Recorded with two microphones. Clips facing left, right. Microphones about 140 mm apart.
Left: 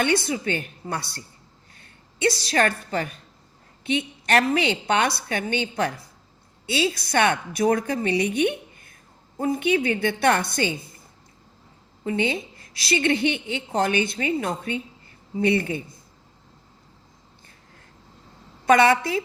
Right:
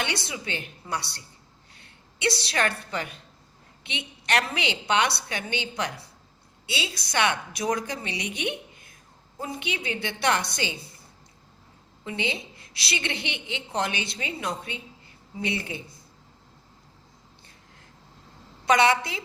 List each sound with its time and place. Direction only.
0.0 s a woman's voice: 50° left (ahead or behind)
12.0 s a woman's voice: 45° left (ahead or behind)
18.6 s a woman's voice: 50° left (ahead or behind)